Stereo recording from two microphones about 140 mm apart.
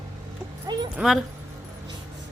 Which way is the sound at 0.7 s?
30° right (ahead or behind).